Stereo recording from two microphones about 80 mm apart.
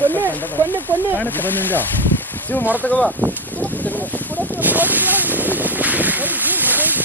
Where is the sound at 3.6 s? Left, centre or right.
Centre.